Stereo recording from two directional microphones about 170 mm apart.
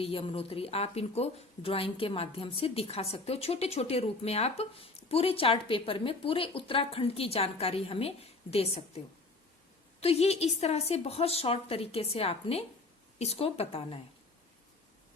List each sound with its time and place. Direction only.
0.0 s speech: 35° left (ahead or behind)
10.0 s speech: 35° left (ahead or behind)